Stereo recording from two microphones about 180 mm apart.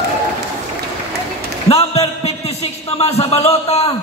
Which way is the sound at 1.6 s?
35° left (ahead or behind).